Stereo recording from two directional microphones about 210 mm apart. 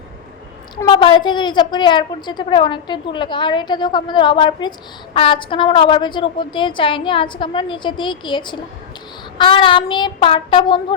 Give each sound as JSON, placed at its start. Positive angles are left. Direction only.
{"t": 0.8, "sound": "a woman's voice", "side_deg": 20}